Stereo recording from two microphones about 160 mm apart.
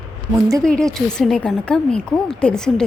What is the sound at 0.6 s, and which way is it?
A woman's voice, 5° left (ahead or behind).